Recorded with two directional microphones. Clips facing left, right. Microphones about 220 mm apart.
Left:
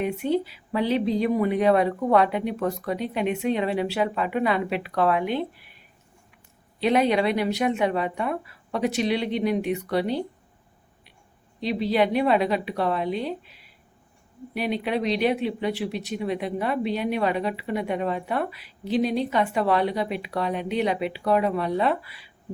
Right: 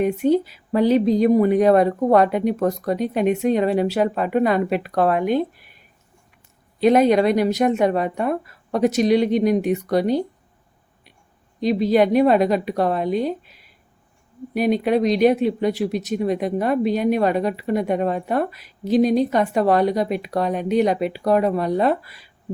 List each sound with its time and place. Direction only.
0.0 s speech: 45° right (ahead or behind)
11.6 s speech: 45° right (ahead or behind)